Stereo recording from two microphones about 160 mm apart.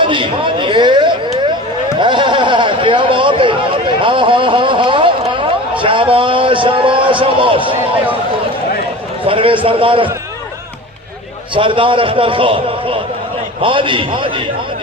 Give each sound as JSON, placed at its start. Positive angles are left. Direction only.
{"t": 0.0, "sound": "a sound", "side_deg": -30}
{"t": 9.2, "sound": "a man's voice", "side_deg": -35}
{"t": 11.5, "sound": "a man's voice", "side_deg": -30}